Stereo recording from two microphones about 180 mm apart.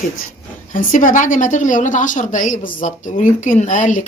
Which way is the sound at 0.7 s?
50° left (ahead or behind).